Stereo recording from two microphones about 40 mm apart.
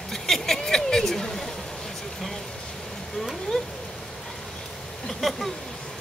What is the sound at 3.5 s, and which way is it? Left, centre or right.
Speech, centre.